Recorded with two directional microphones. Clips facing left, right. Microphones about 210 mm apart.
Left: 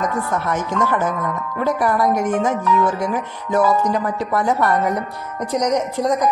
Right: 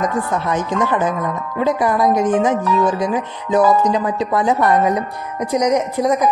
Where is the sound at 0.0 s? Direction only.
15° right (ahead or behind).